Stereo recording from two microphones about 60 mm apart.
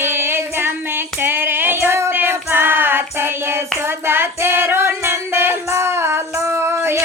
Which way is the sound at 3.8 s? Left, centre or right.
Right.